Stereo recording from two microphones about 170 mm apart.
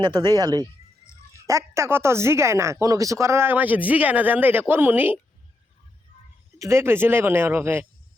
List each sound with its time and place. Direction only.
0.0 s speech: 25° right (ahead or behind)
6.6 s speech: 15° right (ahead or behind)